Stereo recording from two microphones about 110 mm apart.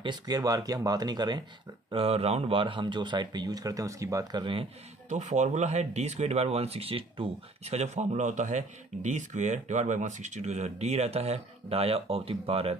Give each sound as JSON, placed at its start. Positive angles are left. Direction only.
{"t": 0.0, "sound": "speech", "side_deg": -40}
{"t": 1.9, "sound": "speech", "side_deg": -60}
{"t": 5.1, "sound": "speech", "side_deg": -90}